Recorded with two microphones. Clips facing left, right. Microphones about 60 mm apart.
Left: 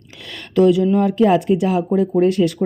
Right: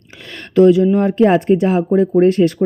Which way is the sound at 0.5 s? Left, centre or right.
Right.